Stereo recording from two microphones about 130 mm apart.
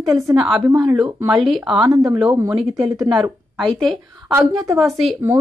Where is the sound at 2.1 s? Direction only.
10° right (ahead or behind).